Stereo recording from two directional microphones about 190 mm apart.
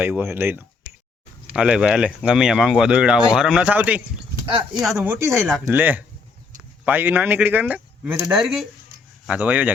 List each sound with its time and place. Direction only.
0.0 s speech: 10° right (ahead or behind)
4.4 s speech: 30° right (ahead or behind)
4.8 s speech: 5° right (ahead or behind)